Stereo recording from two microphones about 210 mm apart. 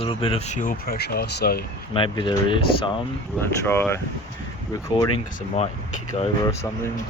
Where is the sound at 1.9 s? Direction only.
25° left (ahead or behind).